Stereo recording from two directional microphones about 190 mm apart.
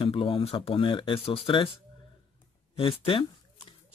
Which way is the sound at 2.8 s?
30° left (ahead or behind).